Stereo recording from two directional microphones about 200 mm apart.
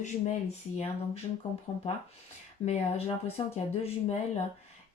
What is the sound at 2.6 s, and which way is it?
Speech, 30° left (ahead or behind).